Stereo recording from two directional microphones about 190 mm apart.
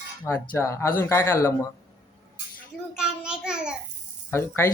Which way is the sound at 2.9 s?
5° right (ahead or behind).